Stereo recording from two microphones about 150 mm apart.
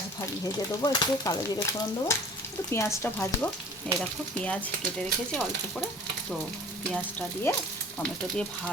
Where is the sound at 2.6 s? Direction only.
20° left (ahead or behind).